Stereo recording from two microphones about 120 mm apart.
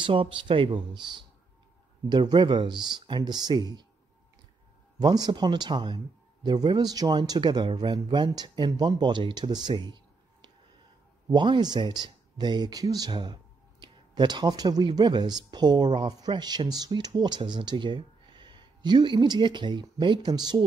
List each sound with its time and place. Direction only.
0.0 s speech: 45° right (ahead or behind)
5.0 s speech: 35° right (ahead or behind)